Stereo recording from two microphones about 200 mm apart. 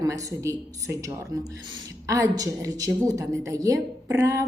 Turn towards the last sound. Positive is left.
turn(degrees=-15)  # may be behind; listen again after turning